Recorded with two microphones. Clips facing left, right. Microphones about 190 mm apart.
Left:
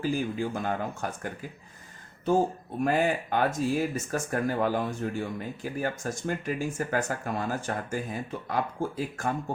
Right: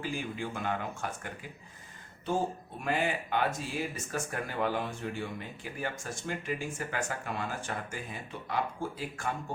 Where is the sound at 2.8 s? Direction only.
45° left (ahead or behind).